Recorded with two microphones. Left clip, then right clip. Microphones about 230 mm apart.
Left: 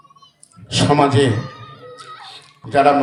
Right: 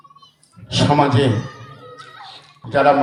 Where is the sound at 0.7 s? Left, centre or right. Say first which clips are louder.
Left 1 dB; left.